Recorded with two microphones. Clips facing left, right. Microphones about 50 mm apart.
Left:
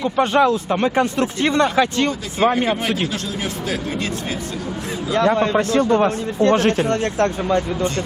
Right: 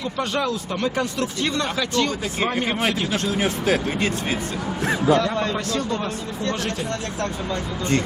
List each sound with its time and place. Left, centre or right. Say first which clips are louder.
0.0 s speech: left 8 dB; left
3.1 s speech: right 3 dB; right
5.1 s speech: left 5 dB; left